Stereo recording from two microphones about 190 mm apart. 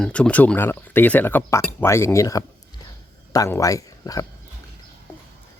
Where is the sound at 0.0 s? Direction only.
5° left (ahead or behind).